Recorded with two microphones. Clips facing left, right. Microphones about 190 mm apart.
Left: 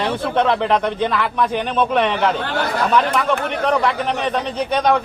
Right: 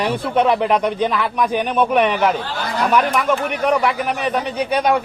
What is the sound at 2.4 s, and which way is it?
Speech, 60° left (ahead or behind).